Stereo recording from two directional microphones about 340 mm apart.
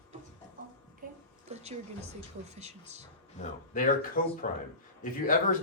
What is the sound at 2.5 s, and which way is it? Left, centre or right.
Speech, centre.